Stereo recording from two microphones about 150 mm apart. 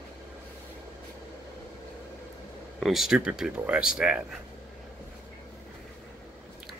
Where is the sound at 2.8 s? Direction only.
Centre (ahead or behind).